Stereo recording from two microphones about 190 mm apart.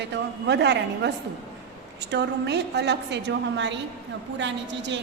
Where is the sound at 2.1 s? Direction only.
65° right (ahead or behind).